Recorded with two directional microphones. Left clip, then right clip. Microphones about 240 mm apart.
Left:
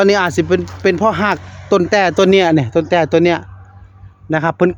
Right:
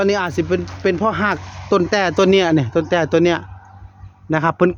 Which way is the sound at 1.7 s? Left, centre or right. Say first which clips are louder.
Left 4 dB; centre.